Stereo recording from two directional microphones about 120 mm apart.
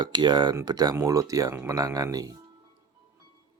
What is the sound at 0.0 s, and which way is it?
Speech, 40° right (ahead or behind).